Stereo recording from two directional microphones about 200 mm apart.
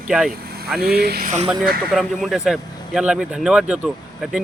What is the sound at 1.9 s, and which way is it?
Speech, centre (ahead or behind).